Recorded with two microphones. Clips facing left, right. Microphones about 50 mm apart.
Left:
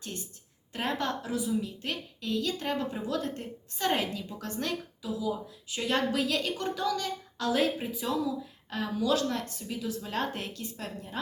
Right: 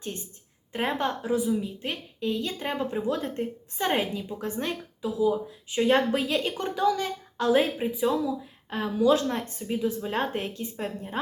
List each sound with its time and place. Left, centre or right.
0.7 s a woman's voice: right